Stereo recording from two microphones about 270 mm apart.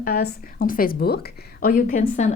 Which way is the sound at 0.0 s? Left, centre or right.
Left.